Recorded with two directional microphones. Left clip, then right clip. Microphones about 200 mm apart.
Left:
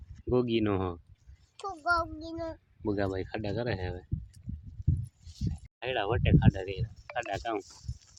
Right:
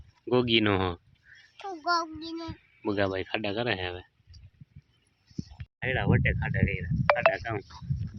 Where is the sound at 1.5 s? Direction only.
60° left (ahead or behind).